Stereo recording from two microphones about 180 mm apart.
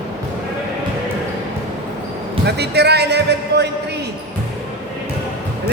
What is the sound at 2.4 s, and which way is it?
Music, 65° right (ahead or behind).